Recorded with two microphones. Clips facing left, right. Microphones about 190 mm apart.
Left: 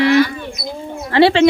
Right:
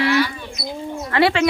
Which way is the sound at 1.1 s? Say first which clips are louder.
Left 6 dB; 30° left (ahead or behind).